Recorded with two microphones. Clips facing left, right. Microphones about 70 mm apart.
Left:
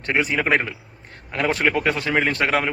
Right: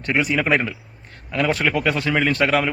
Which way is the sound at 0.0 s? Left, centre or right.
Left.